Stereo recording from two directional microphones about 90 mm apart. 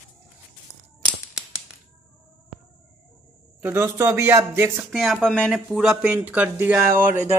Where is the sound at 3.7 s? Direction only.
25° right (ahead or behind).